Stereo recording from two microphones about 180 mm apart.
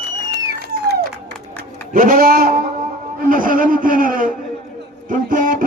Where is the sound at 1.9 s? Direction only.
50° right (ahead or behind).